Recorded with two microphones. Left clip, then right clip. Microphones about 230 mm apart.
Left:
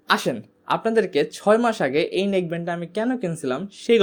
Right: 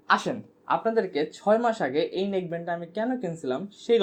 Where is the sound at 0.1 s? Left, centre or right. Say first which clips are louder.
Left 2 dB; left.